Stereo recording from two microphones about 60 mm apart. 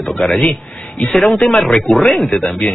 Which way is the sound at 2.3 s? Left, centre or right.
Centre.